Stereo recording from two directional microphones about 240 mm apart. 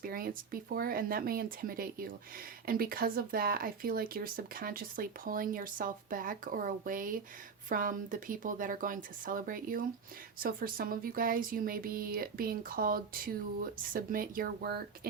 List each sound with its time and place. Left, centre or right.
0.0 s speech: right